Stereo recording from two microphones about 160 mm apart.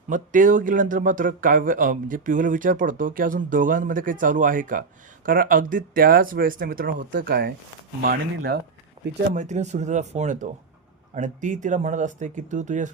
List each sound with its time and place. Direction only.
0.1 s speech: 55° right (ahead or behind)
9.3 s speech: 50° right (ahead or behind)